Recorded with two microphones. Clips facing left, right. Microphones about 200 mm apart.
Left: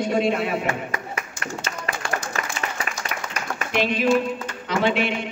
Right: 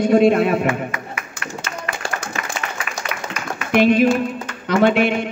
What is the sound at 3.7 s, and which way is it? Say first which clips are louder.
A man's voice: right 6 dB; 55° right (ahead or behind).